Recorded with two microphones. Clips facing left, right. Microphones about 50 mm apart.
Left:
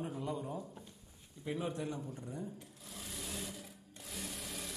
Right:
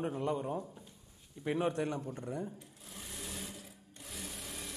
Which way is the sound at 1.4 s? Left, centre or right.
Right.